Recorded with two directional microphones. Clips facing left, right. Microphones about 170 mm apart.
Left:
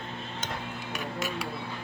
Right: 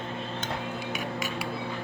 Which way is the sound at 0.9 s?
Centre (ahead or behind).